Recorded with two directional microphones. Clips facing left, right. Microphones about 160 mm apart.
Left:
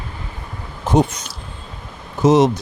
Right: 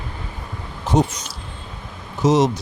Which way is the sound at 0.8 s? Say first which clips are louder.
Left 2 dB; 60° left (ahead or behind).